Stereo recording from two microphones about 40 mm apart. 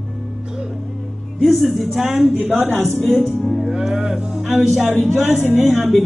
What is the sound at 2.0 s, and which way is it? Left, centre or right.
Speech, right.